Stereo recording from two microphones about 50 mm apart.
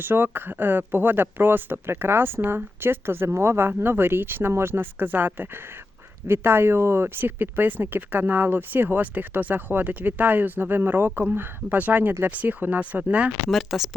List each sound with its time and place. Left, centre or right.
0.0 s speech: right
13.5 s speech: centre